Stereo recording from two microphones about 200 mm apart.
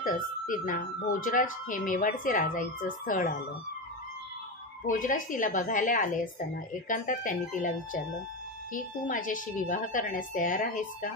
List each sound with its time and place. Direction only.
0.0 s speech: 40° left (ahead or behind)
4.8 s speech: 40° left (ahead or behind)